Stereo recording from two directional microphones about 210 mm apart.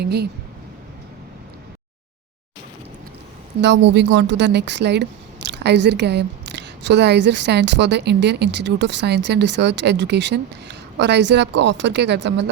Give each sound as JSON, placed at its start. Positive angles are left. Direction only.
{"t": 0.0, "sound": "speech", "side_deg": -50}
{"t": 3.6, "sound": "speech", "side_deg": -55}